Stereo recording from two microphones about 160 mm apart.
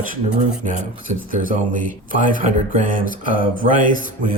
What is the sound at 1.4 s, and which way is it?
Speech, 60° right (ahead or behind).